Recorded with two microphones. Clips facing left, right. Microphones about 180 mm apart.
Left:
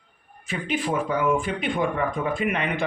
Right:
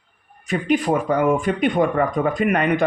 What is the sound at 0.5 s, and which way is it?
A man's voice, 40° right (ahead or behind).